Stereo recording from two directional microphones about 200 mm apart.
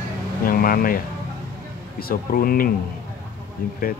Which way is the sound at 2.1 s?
45° left (ahead or behind).